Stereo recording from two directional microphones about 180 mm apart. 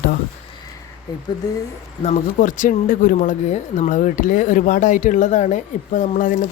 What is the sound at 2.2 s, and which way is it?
Speech, 45° left (ahead or behind).